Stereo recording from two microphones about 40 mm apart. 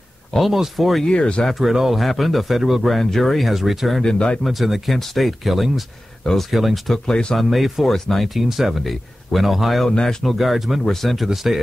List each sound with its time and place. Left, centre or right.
0.5 s speech: centre
1.0 s speech: left
1.5 s speech: centre
3.4 s speech: centre
4.0 s speech: left
4.5 s speech: centre
7.1 s speech: left
7.3 s speech: centre
7.9 s speech: centre
8.3 s speech: centre
11.2 s speech: centre